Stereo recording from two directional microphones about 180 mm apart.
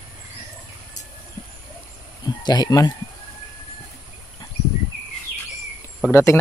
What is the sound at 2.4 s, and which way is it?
Speech, 20° left (ahead or behind).